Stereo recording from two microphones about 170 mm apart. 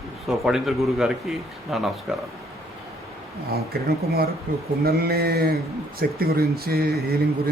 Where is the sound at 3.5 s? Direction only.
65° right (ahead or behind).